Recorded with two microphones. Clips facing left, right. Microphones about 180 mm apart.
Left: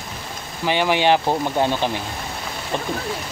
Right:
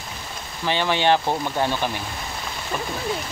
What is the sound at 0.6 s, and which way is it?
Speech, 15° left (ahead or behind).